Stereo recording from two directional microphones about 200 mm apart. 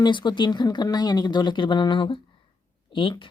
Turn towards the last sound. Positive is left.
turn(degrees=25)  # may be behind; listen again after turning